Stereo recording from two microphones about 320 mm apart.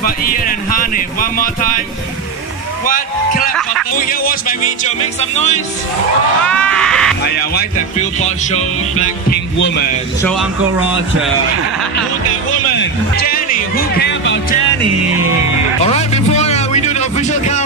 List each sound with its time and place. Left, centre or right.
0.0 s speech: left
2.9 s speech: left
6.4 s a sound: centre
7.2 s speech: left
12.7 s music: left
15.8 s music: centre